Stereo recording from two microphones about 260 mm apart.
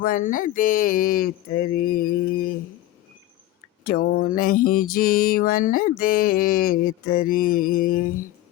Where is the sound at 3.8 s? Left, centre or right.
Left.